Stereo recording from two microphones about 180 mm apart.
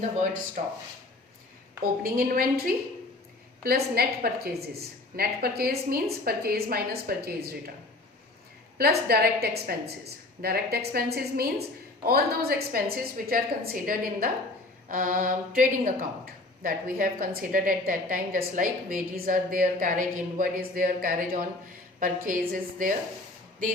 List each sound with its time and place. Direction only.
0.0 s speech: 45° right (ahead or behind)
1.8 s a woman's voice: 55° right (ahead or behind)
8.8 s a woman's voice: 60° right (ahead or behind)